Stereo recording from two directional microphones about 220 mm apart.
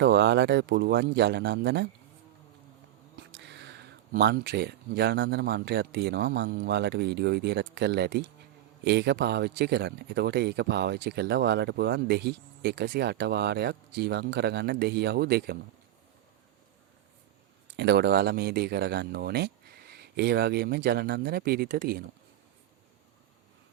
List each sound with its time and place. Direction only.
0.0 s speech: 50° right (ahead or behind)
3.3 s speech: 50° right (ahead or behind)
17.7 s speech: 50° right (ahead or behind)